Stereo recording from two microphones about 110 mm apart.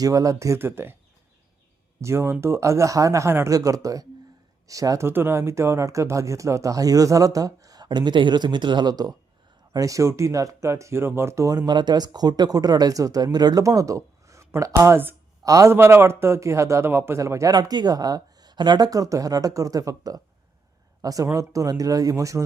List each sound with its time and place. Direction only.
0.0 s speech: 30° right (ahead or behind)
2.0 s speech: 25° right (ahead or behind)